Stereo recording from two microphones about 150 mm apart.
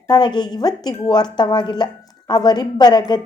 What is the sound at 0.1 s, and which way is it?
Speech, 30° left (ahead or behind).